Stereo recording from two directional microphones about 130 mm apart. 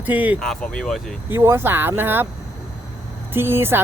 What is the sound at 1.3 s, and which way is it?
Speech, 20° right (ahead or behind).